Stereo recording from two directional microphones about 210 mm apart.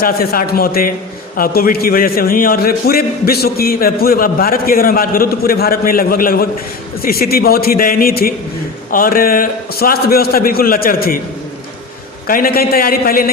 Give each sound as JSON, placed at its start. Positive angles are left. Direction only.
{"t": 0.0, "sound": "a man's voice", "side_deg": 45}
{"t": 12.3, "sound": "a man's voice", "side_deg": 45}